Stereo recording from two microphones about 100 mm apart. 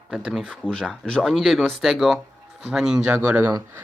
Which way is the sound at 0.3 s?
5° left (ahead or behind).